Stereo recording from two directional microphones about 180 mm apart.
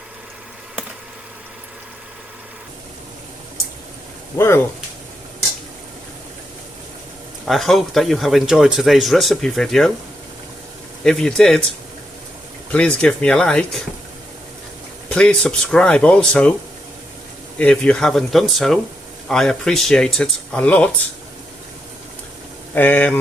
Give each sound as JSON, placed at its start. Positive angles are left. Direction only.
{"t": 4.4, "sound": "speech", "side_deg": 15}
{"t": 7.4, "sound": "speech", "side_deg": 0}
{"t": 11.0, "sound": "speech", "side_deg": 5}
{"t": 12.7, "sound": "speech", "side_deg": 5}
{"t": 15.1, "sound": "speech", "side_deg": 5}
{"t": 17.6, "sound": "speech", "side_deg": 5}
{"t": 22.7, "sound": "speech", "side_deg": 10}